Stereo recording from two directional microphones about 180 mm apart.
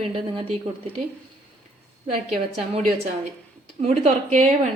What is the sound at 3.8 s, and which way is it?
Speech, 40° right (ahead or behind).